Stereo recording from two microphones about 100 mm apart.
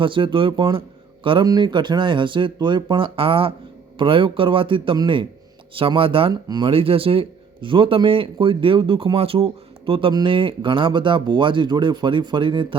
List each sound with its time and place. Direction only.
0.0 s a man's voice: 55° right (ahead or behind)
1.5 s a man's voice: 45° right (ahead or behind); by 6.3 s 65° right (ahead or behind)
6.3 s speech: 45° right (ahead or behind)
6.7 s a man's voice: 65° right (ahead or behind)